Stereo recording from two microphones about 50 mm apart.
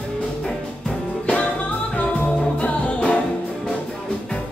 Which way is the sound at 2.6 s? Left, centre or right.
Left.